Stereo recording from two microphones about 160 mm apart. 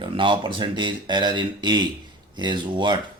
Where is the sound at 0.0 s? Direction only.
30° right (ahead or behind).